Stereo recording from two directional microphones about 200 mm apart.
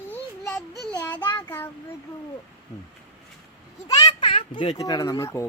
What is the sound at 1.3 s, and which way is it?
Child singing, 10° left (ahead or behind).